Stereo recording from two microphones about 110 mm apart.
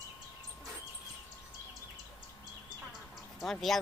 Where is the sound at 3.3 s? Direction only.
Centre (ahead or behind).